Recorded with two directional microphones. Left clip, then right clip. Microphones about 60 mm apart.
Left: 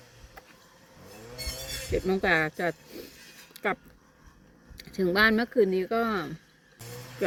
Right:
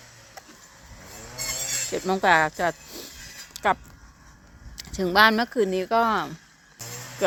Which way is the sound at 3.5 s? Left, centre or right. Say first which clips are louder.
Right 7 dB; left.